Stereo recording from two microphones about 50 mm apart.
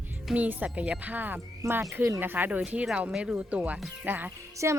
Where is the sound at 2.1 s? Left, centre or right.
Right.